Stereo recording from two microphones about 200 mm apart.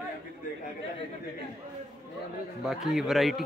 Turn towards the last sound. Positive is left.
turn(degrees=0)  # may be behind; listen again after turning